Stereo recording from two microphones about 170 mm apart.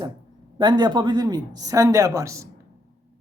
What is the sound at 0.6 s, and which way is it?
A woman's voice, 25° right (ahead or behind).